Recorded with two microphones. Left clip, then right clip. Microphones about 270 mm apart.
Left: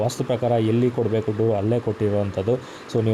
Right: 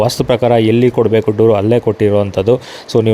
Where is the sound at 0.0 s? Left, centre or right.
Right.